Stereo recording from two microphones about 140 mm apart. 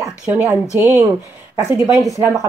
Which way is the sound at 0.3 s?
20° right (ahead or behind).